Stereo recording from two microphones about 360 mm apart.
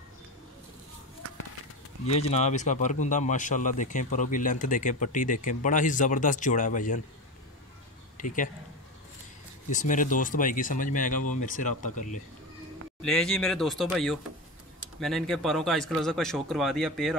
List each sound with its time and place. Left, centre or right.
2.0 s speech: centre
8.2 s a man's voice: left
9.7 s speech: left
13.0 s a man's voice: centre